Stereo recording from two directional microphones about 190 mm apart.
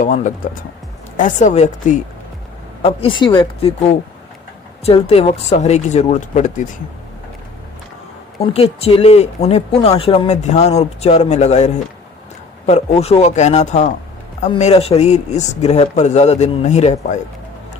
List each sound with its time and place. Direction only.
0.0 s speech: 40° left (ahead or behind)
2.8 s speech: 30° left (ahead or behind)
8.4 s speech: 30° left (ahead or behind)